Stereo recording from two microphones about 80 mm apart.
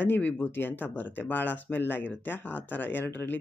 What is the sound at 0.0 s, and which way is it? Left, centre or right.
Speech, left.